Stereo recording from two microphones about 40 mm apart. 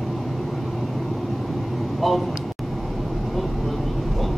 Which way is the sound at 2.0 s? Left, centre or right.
Centre.